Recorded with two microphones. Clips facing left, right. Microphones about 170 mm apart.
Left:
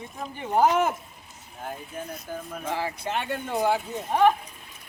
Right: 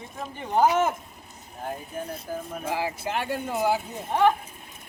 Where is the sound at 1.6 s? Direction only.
30° right (ahead or behind).